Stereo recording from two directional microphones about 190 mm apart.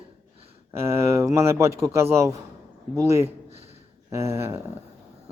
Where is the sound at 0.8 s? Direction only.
15° right (ahead or behind).